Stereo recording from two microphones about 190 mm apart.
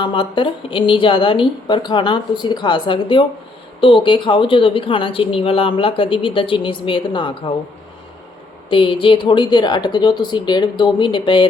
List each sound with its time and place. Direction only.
0.0 s speech: 25° left (ahead or behind)
8.7 s speech: 25° left (ahead or behind)